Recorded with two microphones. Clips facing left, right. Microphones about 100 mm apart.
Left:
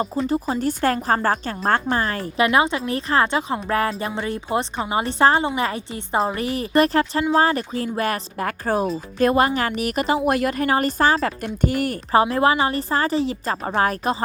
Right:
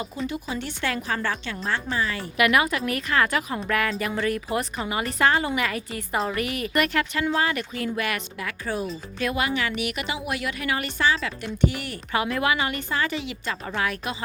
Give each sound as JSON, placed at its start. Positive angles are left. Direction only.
{"t": 0.3, "sound": "a woman's voice", "side_deg": 40}
{"t": 2.4, "sound": "a woman's voice", "side_deg": 30}